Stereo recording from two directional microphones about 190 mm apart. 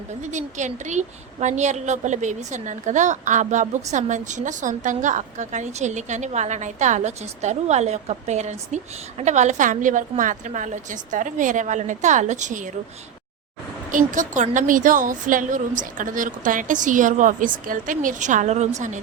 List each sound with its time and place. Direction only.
0.1 s a woman's voice: 40° right (ahead or behind)
13.9 s a woman's voice: 45° right (ahead or behind)